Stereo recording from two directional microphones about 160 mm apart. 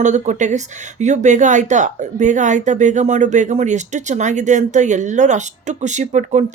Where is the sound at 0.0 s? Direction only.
50° right (ahead or behind).